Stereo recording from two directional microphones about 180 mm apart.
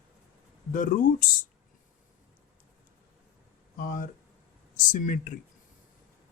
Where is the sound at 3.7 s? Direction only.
50° left (ahead or behind).